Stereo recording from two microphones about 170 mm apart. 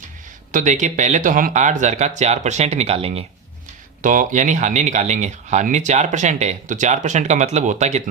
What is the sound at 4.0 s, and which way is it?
Speech, 50° right (ahead or behind).